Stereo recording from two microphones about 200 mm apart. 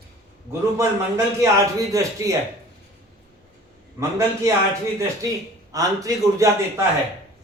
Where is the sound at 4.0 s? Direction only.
15° right (ahead or behind).